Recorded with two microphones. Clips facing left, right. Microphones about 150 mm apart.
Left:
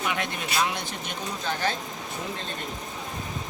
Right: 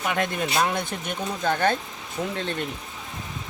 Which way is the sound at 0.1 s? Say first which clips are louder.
Right 5 dB; 50° right (ahead or behind).